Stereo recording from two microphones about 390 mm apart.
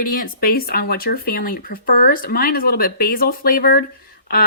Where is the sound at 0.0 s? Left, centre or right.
Left.